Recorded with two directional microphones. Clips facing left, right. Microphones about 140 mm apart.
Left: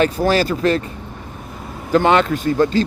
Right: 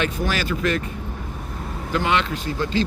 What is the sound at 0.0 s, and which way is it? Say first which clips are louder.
Speech: left 8 dB; 35° left (ahead or behind).